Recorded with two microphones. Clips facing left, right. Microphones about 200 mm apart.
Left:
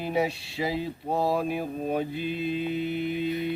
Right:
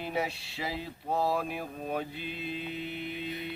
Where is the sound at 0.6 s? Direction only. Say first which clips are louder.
Left 8 dB; 15° left (ahead or behind).